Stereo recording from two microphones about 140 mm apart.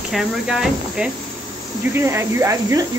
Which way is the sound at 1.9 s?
20° right (ahead or behind).